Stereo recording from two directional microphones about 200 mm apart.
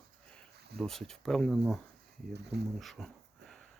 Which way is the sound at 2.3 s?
55° right (ahead or behind).